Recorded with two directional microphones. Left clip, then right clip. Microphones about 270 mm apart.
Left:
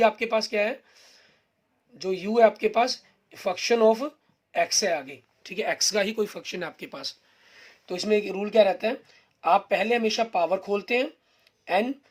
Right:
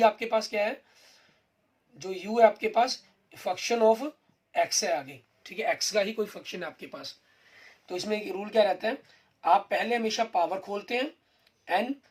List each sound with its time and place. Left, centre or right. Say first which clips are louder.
0.0 s speech: left 2 dB; left
2.0 s speech: left 2 dB; left